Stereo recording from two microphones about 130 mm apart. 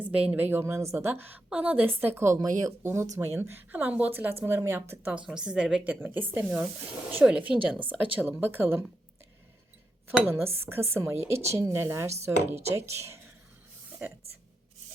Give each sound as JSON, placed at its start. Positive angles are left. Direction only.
{"t": 0.0, "sound": "a woman's voice", "side_deg": -10}
{"t": 5.2, "sound": "a woman's voice", "side_deg": -5}
{"t": 10.1, "sound": "a woman's voice", "side_deg": -15}